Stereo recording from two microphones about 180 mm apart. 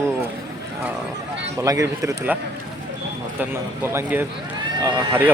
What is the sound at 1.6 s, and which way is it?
Speech, 20° right (ahead or behind).